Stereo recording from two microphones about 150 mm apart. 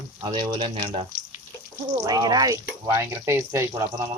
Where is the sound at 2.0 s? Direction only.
25° right (ahead or behind).